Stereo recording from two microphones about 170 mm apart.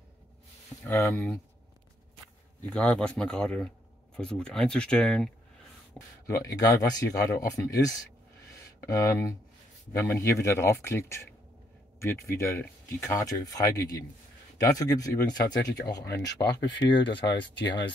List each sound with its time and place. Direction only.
0.8 s speech: 15° left (ahead or behind)
2.7 s speech: 5° left (ahead or behind)
5.9 s speech: 20° left (ahead or behind)